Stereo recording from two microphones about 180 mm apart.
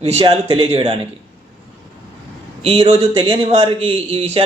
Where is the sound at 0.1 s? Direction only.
30° right (ahead or behind).